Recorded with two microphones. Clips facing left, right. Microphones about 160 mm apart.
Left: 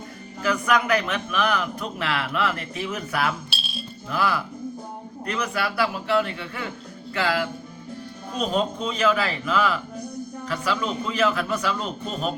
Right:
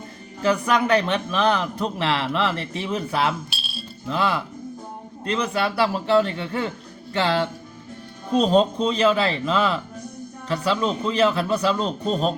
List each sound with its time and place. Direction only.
0.4 s a man's voice: 30° right (ahead or behind)